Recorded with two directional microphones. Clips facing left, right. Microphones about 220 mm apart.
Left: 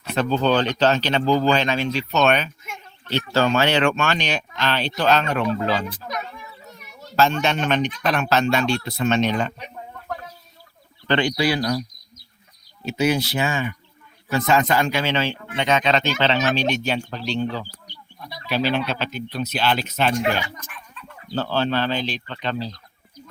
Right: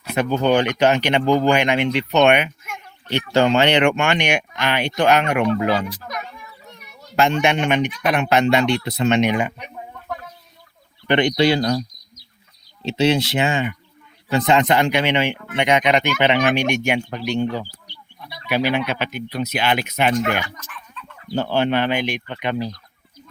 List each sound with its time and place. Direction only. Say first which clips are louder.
0.0 s speech: right 1 dB; 10° right (ahead or behind)
7.4 s speech: right 3 dB; 15° right (ahead or behind)
11.1 s speech: right 4 dB; 20° right (ahead or behind)
12.8 s speech: right 3 dB; 25° right (ahead or behind)
18.4 s speech: right 2 dB; 15° right (ahead or behind)
21.3 s speech: right 3 dB; 15° right (ahead or behind)